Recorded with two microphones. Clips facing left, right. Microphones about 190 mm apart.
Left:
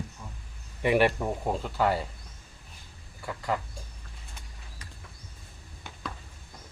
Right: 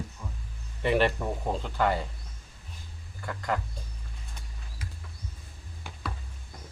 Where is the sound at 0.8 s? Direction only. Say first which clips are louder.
Left 2 dB; 10° left (ahead or behind).